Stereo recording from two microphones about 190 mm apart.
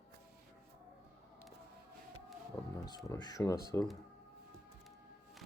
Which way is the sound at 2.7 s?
20° left (ahead or behind).